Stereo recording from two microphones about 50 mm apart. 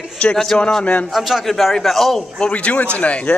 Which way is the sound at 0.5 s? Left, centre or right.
Centre.